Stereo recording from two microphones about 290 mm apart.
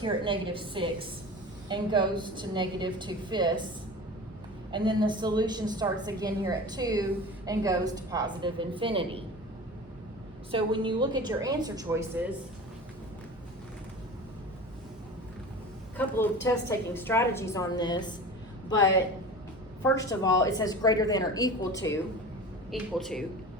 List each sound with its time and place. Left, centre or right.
0.0 s a woman's voice: centre
4.7 s a woman's voice: centre
10.5 s a woman's voice: centre
16.0 s a woman's voice: centre
19.8 s a woman's voice: centre